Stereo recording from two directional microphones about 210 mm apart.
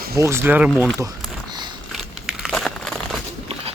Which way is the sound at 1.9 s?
Centre (ahead or behind).